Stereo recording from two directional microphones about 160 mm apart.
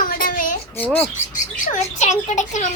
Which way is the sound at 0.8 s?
10° left (ahead or behind).